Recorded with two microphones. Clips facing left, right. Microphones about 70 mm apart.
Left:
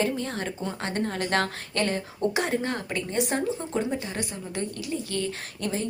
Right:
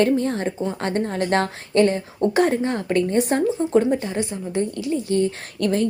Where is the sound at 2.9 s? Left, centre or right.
Right.